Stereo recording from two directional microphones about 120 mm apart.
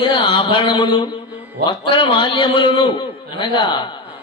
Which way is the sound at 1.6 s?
40° left (ahead or behind).